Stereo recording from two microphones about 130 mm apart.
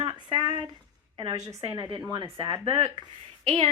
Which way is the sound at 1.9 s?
35° right (ahead or behind).